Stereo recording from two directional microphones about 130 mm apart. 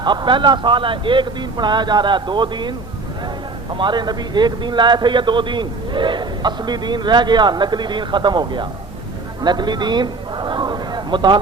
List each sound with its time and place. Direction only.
0.0 s a man's voice: 35° right (ahead or behind)
3.8 s a man's voice: 35° right (ahead or behind)
9.4 s a sound: 35° right (ahead or behind)